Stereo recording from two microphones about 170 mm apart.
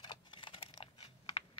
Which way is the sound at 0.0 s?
25° left (ahead or behind).